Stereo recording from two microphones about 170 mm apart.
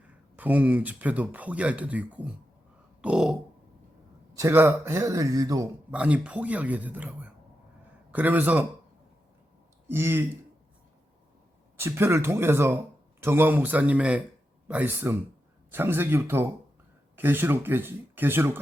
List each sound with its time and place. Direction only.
0.3 s speech: 10° right (ahead or behind)
3.0 s grunt: 5° right (ahead or behind)
4.4 s speech: 15° right (ahead or behind)
5.9 s speech: 10° right (ahead or behind)
9.9 s speech: 15° right (ahead or behind)
11.8 s speech: 15° right (ahead or behind)